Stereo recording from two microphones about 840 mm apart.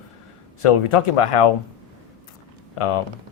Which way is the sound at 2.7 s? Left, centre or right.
Left.